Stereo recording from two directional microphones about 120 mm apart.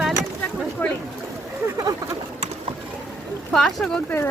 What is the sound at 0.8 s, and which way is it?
Speech, 15° left (ahead or behind).